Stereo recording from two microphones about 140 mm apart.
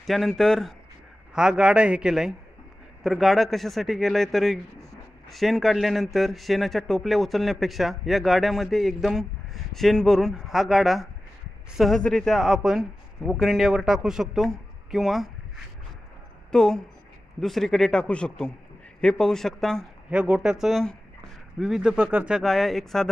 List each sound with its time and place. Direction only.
0.0 s speech: centre (ahead or behind)
16.5 s speech: 5° left (ahead or behind)
20.1 s speech: 10° right (ahead or behind)